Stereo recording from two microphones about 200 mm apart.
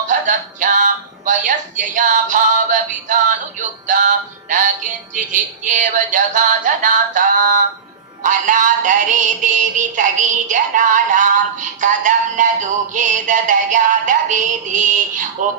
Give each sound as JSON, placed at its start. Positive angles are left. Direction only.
{"t": 0.1, "sound": "music", "side_deg": -40}